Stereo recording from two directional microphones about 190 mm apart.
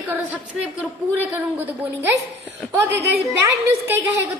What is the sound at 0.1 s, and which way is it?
A woman's voice, 10° right (ahead or behind).